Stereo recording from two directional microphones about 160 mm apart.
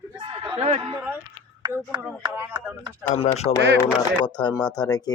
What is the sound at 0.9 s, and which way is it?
Speech, 10° right (ahead or behind).